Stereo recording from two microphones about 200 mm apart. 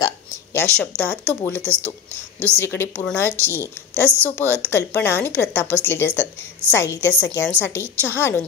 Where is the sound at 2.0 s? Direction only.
10° right (ahead or behind).